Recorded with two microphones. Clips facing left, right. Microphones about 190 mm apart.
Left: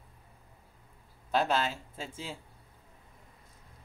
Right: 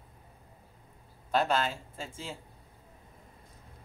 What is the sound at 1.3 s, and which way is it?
Speech, 5° left (ahead or behind).